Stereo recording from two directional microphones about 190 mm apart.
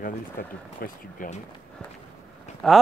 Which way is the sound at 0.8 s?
45° left (ahead or behind).